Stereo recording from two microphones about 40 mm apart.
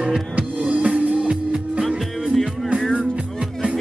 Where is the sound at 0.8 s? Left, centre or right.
Right.